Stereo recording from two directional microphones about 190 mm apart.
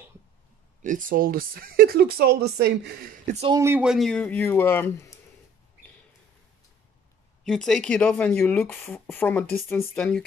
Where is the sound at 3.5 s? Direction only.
10° right (ahead or behind); by 5.2 s 10° left (ahead or behind).